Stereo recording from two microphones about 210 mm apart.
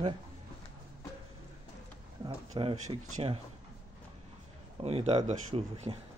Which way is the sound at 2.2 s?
25° right (ahead or behind).